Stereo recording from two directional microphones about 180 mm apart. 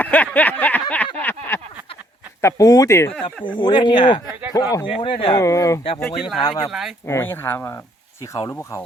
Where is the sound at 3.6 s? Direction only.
25° left (ahead or behind).